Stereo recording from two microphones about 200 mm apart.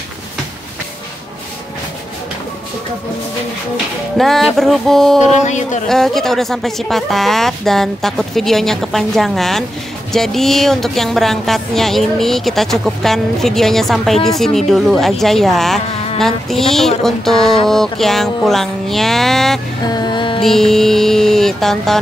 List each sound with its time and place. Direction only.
3.7 s speech: centre (ahead or behind)
5.3 s speech: 35° left (ahead or behind)
5.9 s speech: centre (ahead or behind)
19.9 s music: 20° left (ahead or behind)
20.4 s speech: centre (ahead or behind)